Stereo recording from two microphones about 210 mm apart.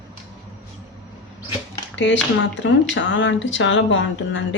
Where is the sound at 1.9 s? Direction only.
60° left (ahead or behind).